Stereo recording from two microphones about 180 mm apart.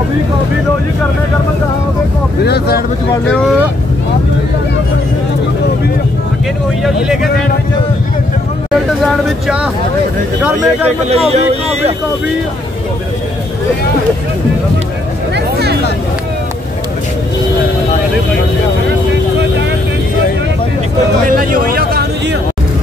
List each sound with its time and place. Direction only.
2.4 s speech: 65° left (ahead or behind)
6.8 s speech: 5° right (ahead or behind)
10.4 s speech: 10° right (ahead or behind)
11.1 s speech: 35° right (ahead or behind)
15.3 s music: 65° right (ahead or behind)
21.3 s speech: 50° right (ahead or behind)